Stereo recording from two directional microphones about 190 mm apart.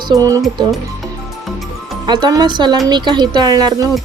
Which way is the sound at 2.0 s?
20° right (ahead or behind).